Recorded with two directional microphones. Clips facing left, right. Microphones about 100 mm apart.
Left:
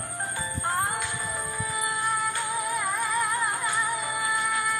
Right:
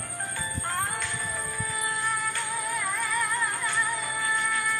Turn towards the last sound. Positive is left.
turn(degrees=15)  # may be behind; listen again after turning